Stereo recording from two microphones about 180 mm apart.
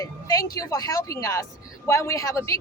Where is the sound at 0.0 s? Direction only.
20° left (ahead or behind).